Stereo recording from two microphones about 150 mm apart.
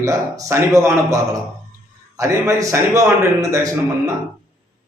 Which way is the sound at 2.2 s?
20° right (ahead or behind).